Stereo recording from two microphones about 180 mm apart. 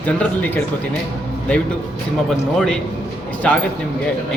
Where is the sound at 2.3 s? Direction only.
5° left (ahead or behind).